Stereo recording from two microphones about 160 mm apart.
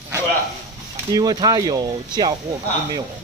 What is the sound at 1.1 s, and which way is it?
Speech, 25° right (ahead or behind).